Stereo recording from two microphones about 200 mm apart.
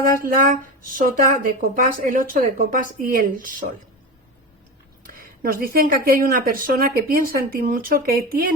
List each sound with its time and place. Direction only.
0.0 s speech: 45° right (ahead or behind)
5.0 s speech: 45° right (ahead or behind)